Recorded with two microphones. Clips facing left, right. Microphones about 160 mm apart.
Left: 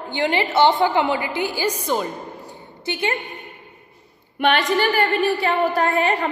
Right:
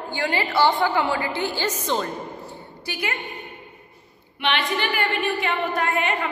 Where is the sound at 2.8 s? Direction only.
25° left (ahead or behind).